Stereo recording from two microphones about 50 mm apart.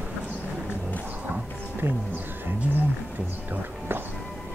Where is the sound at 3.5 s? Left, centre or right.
Right.